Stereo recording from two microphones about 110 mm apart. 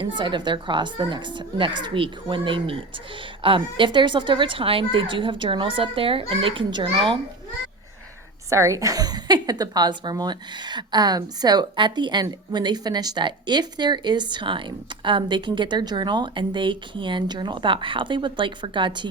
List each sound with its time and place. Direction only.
0.0 s a woman's voice: 45° right (ahead or behind)
8.4 s a woman's voice: 25° right (ahead or behind); by 19.0 s 45° right (ahead or behind)